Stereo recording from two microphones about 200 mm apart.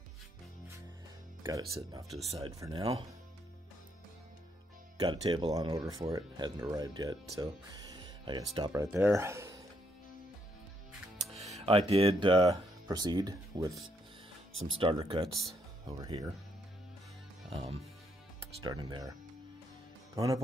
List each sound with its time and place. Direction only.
1.4 s speech: 15° right (ahead or behind)
2.2 s speech: 30° right (ahead or behind)
4.9 s speech: 25° right (ahead or behind)
8.8 s speech: 10° right (ahead or behind)
11.3 s speech: 30° right (ahead or behind)
14.8 s speech: 25° right (ahead or behind)
17.5 s speech: 30° right (ahead or behind)
20.2 s speech: 15° right (ahead or behind)